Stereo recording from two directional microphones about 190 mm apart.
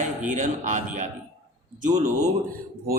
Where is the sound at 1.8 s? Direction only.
45° right (ahead or behind).